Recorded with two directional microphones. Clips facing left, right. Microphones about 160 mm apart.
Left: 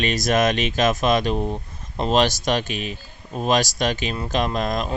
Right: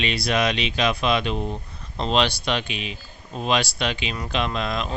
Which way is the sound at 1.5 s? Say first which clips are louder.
Left 3 dB; 15° left (ahead or behind).